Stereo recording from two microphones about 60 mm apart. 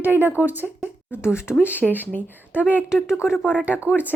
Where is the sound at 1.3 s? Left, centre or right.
Left.